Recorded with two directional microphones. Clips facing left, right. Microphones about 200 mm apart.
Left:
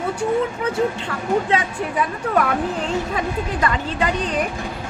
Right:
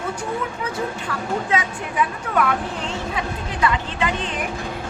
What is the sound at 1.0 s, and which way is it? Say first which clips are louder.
Speech: left 4 dB; 30° left (ahead or behind).